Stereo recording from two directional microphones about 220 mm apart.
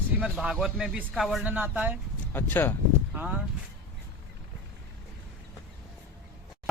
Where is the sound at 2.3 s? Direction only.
10° left (ahead or behind).